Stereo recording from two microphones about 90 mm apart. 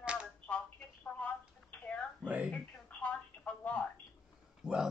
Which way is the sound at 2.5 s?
15° left (ahead or behind).